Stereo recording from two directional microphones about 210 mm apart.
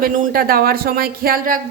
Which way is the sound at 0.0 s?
45° right (ahead or behind).